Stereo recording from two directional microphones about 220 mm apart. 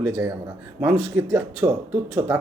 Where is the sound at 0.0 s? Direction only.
10° right (ahead or behind).